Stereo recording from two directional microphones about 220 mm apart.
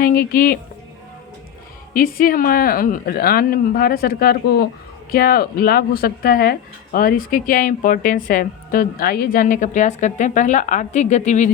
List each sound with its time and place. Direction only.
0.0 s speech: 40° left (ahead or behind)
1.9 s speech: 40° left (ahead or behind)